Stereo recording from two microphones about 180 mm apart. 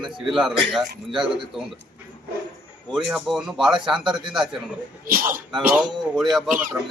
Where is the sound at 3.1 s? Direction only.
Centre (ahead or behind).